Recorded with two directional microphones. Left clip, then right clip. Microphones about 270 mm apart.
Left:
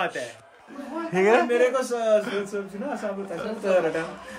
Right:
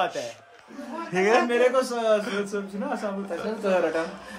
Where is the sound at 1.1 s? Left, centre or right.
Centre.